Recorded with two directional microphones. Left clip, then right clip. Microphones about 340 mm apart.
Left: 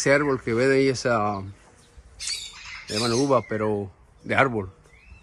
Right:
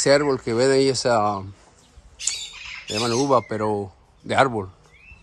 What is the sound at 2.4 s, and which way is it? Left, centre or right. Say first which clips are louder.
Squawk: right 3 dB; centre.